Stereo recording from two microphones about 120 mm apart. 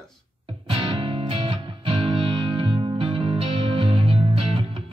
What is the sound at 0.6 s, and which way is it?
Music, 50° right (ahead or behind).